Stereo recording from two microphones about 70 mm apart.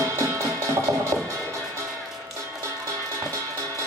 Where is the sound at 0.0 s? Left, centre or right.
Right.